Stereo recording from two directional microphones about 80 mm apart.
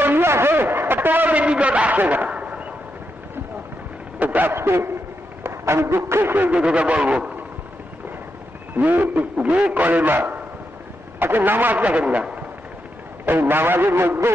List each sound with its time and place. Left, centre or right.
0.0 s a sound: right
4.2 s a man's voice: right
8.7 s a man's voice: right